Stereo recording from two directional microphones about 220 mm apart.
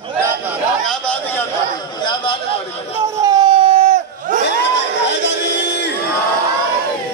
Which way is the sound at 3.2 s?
25° right (ahead or behind).